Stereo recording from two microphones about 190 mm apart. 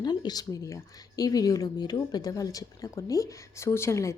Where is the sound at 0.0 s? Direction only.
20° left (ahead or behind).